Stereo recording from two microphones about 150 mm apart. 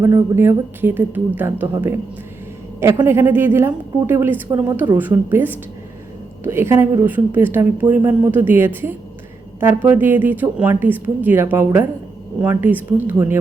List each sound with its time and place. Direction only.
0.0 s speech: 20° right (ahead or behind)